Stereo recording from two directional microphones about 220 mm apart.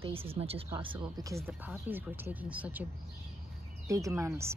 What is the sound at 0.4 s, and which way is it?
A woman's voice, 25° right (ahead or behind).